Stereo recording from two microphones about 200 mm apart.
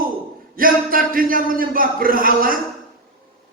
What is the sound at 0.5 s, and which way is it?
A man's voice, 45° right (ahead or behind).